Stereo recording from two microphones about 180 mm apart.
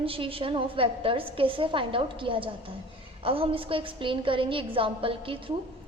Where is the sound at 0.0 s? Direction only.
30° right (ahead or behind).